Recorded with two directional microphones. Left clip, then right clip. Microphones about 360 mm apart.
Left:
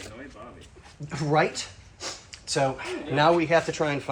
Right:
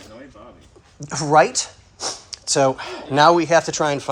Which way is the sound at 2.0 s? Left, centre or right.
Right.